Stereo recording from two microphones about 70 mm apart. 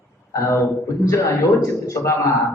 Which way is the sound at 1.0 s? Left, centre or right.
Left.